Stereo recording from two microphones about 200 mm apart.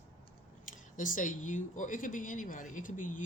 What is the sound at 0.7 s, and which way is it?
A woman's voice, 40° left (ahead or behind).